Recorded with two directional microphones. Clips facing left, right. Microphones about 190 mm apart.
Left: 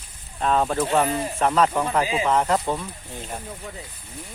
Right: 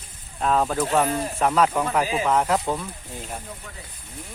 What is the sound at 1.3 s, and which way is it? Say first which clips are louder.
Speech: even; 10° right (ahead or behind).